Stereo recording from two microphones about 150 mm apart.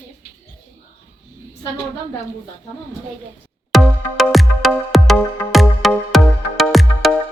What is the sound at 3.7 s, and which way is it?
Music, centre (ahead or behind).